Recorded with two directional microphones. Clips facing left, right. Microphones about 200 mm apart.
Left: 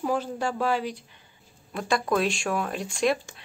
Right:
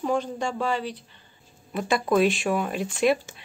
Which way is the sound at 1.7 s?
5° right (ahead or behind).